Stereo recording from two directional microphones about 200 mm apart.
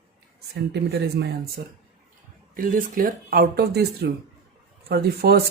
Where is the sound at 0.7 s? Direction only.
55° right (ahead or behind).